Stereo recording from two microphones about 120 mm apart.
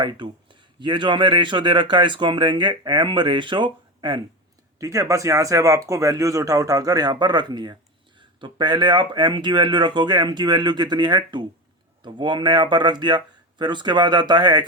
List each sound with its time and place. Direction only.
0.0 s speech: 40° right (ahead or behind)
4.8 s speech: 25° right (ahead or behind)